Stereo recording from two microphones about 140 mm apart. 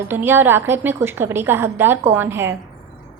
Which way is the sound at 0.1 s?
15° right (ahead or behind).